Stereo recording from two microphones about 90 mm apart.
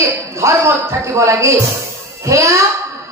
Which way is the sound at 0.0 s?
35° right (ahead or behind).